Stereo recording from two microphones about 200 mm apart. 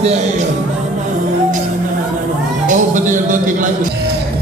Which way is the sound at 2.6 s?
40° right (ahead or behind).